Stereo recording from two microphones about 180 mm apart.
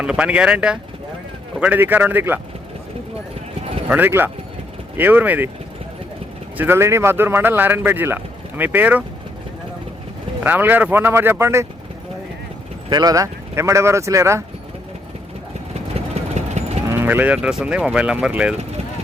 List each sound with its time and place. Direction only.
0.0 s speech: 5° right (ahead or behind)
3.8 s speech: 10° right (ahead or behind)
6.6 s speech: 15° right (ahead or behind)
10.4 s speech: 10° right (ahead or behind)
12.9 s speech: 20° right (ahead or behind)
16.0 s vehicle: 35° right (ahead or behind)
16.9 s speech: 10° right (ahead or behind)